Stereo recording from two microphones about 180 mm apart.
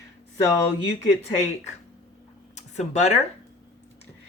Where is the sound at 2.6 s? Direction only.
40° left (ahead or behind).